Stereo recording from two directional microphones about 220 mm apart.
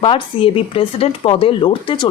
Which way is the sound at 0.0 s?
25° left (ahead or behind).